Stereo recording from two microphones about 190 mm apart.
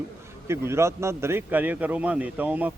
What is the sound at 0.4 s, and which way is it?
A man's voice, 15° right (ahead or behind).